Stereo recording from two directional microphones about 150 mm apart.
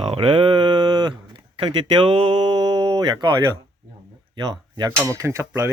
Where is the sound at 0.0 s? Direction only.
40° right (ahead or behind).